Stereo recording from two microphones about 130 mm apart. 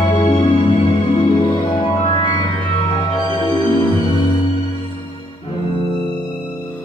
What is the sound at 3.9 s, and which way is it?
Music, 40° left (ahead or behind).